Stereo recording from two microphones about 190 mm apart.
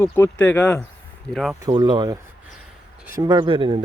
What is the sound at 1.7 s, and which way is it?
Speech, 25° right (ahead or behind).